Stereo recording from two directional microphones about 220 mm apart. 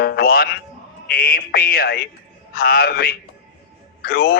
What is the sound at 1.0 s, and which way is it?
Speech, 45° left (ahead or behind).